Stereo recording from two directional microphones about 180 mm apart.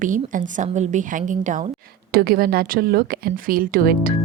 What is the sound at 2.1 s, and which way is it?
A woman's voice, 55° right (ahead or behind).